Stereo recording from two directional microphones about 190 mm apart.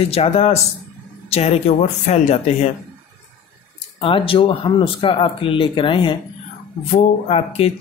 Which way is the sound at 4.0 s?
30° left (ahead or behind).